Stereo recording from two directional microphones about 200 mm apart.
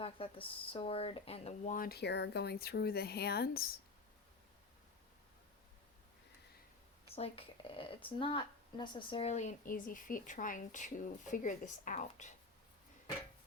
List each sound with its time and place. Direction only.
0.0 s speech: 25° left (ahead or behind); by 3.8 s 50° left (ahead or behind)
7.2 s speech: 25° left (ahead or behind)